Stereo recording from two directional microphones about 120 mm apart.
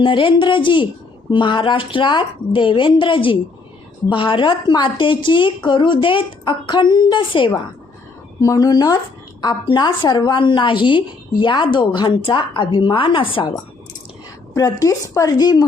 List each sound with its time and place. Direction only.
0.0 s a woman's voice: 45° left (ahead or behind)
8.4 s a woman's voice: 30° left (ahead or behind); by 13.5 s 45° left (ahead or behind)
14.5 s a woman's voice: 30° left (ahead or behind)